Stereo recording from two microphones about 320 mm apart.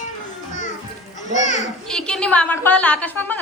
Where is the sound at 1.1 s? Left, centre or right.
Left.